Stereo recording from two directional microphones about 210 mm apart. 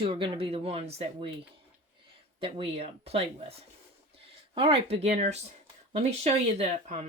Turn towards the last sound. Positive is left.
turn(degrees=-30)  # may be behind; listen again after turning